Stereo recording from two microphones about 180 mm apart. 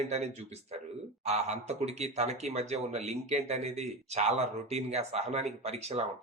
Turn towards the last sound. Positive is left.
turn(degrees=-35)  # may be behind; listen again after turning